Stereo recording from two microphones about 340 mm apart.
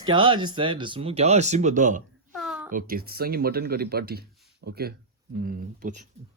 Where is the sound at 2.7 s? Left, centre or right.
Right.